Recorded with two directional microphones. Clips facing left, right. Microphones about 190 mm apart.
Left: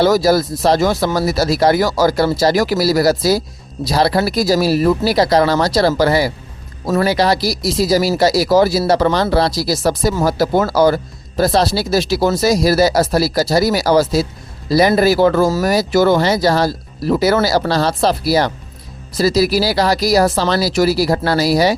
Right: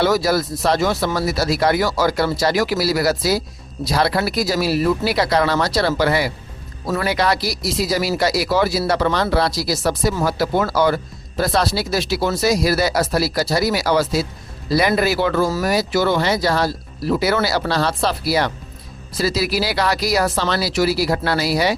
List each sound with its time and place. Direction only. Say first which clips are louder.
0.0 s speech: left 5 dB; 40° left (ahead or behind)